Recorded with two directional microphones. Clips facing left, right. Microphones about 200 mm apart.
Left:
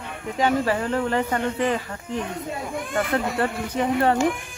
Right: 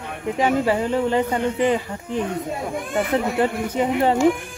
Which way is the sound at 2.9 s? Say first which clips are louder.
Right 3 dB; 15° right (ahead or behind).